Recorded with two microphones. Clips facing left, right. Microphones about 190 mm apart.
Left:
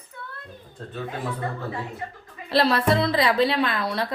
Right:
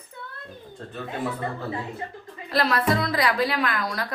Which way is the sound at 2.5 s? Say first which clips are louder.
Left 3 dB; 30° left (ahead or behind).